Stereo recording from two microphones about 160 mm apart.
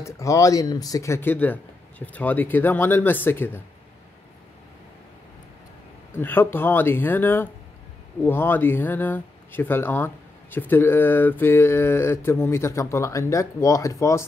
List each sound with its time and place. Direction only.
0.0 s speech: 20° left (ahead or behind)
6.1 s speech: 15° left (ahead or behind)